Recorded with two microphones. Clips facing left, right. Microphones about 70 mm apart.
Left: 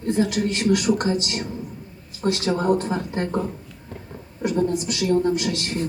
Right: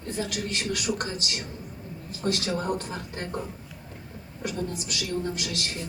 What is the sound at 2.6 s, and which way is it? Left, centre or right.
Speech, left.